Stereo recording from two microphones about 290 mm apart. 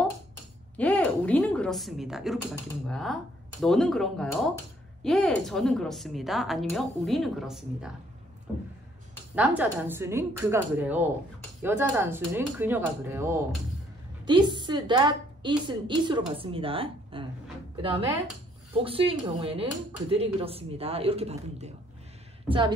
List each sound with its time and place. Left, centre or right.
0.7 s a woman's voice: centre
9.3 s a woman's voice: centre
18.8 s a woman's voice: centre